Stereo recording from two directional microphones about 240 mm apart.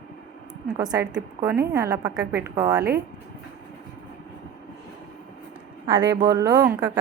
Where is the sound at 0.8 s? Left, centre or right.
Centre.